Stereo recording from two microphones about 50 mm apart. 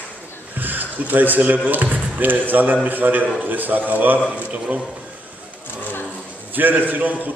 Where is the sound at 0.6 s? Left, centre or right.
Right.